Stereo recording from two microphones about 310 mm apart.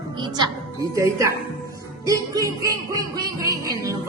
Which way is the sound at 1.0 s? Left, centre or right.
Centre.